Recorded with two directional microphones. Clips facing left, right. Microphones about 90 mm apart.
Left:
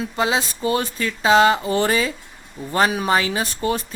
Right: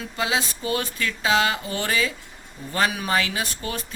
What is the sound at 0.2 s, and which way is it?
Speech, 30° left (ahead or behind).